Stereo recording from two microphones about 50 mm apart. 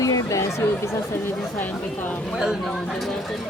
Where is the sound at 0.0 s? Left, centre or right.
Left.